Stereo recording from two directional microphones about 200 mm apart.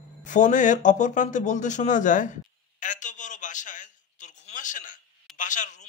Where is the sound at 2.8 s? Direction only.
40° left (ahead or behind).